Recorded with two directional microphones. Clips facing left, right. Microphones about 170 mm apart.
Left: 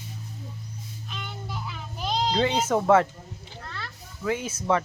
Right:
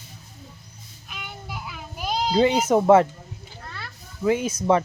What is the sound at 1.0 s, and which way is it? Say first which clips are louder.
Children playing: even; 10° right (ahead or behind).